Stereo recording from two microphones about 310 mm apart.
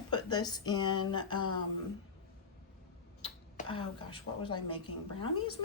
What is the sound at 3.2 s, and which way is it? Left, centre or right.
Speech, centre.